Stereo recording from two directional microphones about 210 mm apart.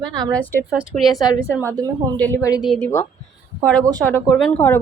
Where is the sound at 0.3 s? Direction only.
5° left (ahead or behind).